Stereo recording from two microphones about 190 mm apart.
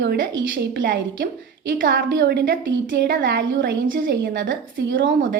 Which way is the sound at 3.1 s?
60° right (ahead or behind).